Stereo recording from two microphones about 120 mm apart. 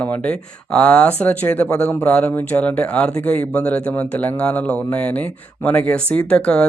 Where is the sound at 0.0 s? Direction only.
10° left (ahead or behind).